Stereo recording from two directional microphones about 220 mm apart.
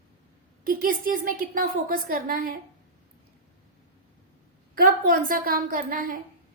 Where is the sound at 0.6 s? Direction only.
40° right (ahead or behind).